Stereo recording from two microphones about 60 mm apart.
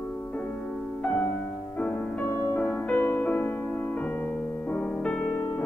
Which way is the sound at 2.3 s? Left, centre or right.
Left.